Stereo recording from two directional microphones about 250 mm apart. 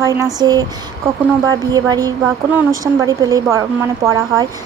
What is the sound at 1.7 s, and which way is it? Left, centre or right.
A woman's voice, centre.